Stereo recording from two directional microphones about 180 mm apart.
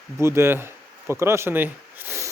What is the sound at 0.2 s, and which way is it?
Speech, 15° right (ahead or behind).